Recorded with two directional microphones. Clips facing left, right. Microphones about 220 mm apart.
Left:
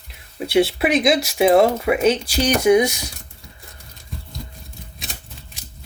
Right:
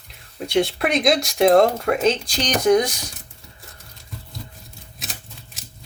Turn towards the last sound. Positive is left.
turn(degrees=0)  # may be behind; listen again after turning